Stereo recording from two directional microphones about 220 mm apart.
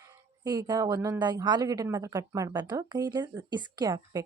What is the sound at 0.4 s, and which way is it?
Speech, 20° right (ahead or behind).